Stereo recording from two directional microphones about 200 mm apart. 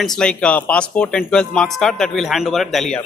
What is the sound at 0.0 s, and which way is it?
Speech, 5° left (ahead or behind).